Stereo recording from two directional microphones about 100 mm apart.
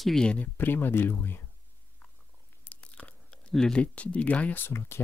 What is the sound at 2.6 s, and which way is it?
Speech, 15° left (ahead or behind).